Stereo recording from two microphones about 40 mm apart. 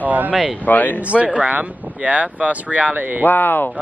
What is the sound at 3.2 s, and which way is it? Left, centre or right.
Speech, left.